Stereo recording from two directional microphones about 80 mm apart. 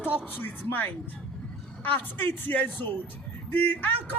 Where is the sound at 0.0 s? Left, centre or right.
Left.